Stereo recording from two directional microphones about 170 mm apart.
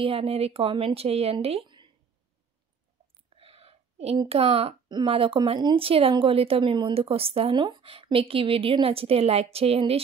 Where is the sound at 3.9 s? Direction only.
35° right (ahead or behind).